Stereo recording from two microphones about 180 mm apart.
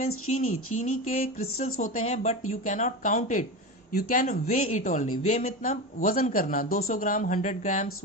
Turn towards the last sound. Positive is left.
turn(degrees=40)  # may be behind; listen again after turning